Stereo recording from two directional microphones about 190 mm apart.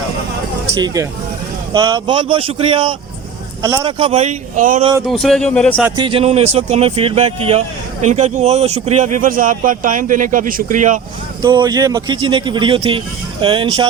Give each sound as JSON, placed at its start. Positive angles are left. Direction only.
{"t": 1.7, "sound": "speech", "side_deg": -20}
{"t": 5.0, "sound": "speech", "side_deg": 0}
{"t": 6.0, "sound": "speech", "side_deg": -30}
{"t": 11.4, "sound": "speech", "side_deg": -20}